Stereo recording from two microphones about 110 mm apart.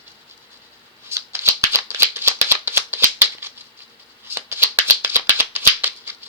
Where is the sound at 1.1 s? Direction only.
25° right (ahead or behind).